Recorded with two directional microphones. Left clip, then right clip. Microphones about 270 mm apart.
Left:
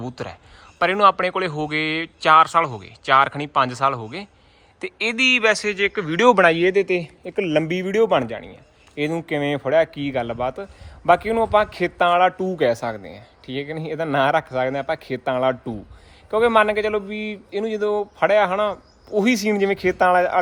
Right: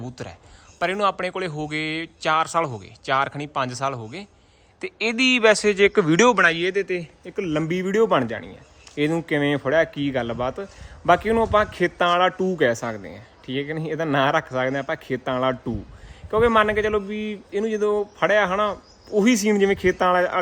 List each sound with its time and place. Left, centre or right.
0.0 s speech: centre
6.2 s speech: centre
6.6 s speech: centre
7.3 s speech: right
7.6 s speech: centre